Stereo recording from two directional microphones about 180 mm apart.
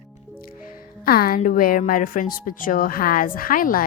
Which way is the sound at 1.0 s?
55° left (ahead or behind).